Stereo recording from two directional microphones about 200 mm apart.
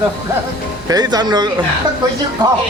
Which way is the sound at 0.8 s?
20° right (ahead or behind).